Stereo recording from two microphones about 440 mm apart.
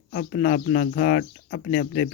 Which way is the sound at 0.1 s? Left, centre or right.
Left.